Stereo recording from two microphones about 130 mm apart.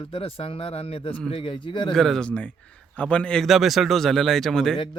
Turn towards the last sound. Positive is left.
turn(degrees=5)  # may be behind; listen again after turning